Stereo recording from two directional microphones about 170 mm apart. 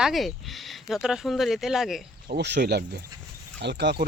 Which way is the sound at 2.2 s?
85° right.